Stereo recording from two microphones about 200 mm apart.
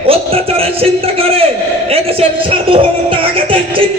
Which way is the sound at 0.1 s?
30° right (ahead or behind).